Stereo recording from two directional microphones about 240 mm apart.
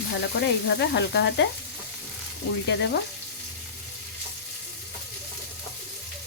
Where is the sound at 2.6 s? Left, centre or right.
Left.